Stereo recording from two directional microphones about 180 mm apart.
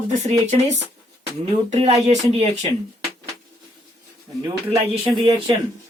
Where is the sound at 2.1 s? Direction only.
35° right (ahead or behind).